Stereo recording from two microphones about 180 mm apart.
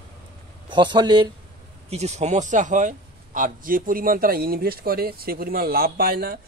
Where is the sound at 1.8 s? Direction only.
35° right (ahead or behind); by 6.4 s 55° right (ahead or behind).